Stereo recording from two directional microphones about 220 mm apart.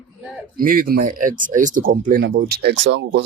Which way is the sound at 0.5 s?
40° right (ahead or behind).